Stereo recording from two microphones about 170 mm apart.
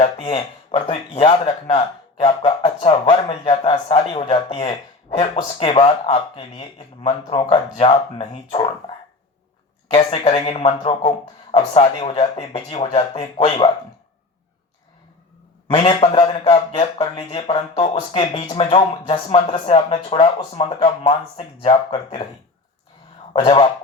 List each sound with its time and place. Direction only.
0.0 s a man's voice: 30° left (ahead or behind)
9.9 s a man's voice: 30° left (ahead or behind)
15.7 s a man's voice: 35° left (ahead or behind)
23.3 s a man's voice: 30° left (ahead or behind)